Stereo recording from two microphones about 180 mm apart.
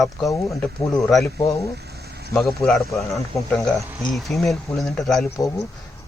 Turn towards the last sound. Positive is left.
turn(degrees=15)  # may be behind; listen again after turning